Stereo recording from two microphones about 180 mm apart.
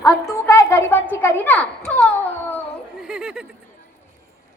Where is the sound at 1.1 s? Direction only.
10° left (ahead or behind).